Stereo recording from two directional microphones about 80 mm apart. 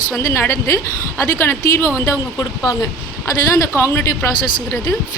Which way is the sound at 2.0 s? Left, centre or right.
Left.